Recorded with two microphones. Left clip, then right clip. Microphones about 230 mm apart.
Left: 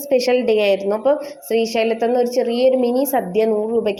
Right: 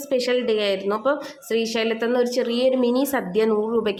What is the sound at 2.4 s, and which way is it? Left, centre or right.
Speech, right.